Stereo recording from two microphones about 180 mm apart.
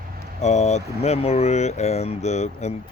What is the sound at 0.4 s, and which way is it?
Speech, 40° left (ahead or behind).